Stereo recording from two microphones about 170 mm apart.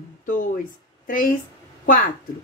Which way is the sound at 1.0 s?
50° left (ahead or behind).